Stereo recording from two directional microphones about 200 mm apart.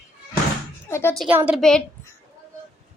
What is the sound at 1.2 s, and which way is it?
Speech, 10° right (ahead or behind).